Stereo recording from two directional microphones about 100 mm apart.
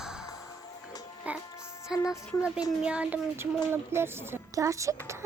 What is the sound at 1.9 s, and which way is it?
Speech, 5° right (ahead or behind).